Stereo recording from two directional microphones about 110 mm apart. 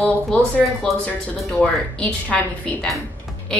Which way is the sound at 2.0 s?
10° left (ahead or behind).